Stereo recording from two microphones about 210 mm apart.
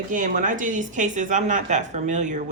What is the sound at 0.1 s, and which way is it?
Speech, 40° right (ahead or behind).